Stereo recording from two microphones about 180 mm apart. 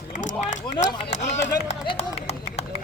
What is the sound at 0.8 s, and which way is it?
Run, 40° left (ahead or behind).